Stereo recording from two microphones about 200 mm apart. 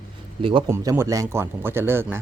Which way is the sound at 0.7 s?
15° right (ahead or behind).